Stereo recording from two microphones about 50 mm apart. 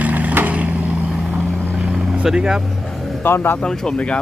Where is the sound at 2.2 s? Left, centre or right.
Centre.